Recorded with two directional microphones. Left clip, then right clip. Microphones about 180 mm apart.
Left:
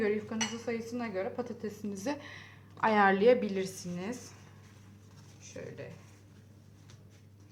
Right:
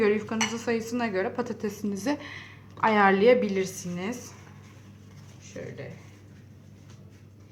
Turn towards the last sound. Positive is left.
turn(degrees=15)  # may be behind; listen again after turning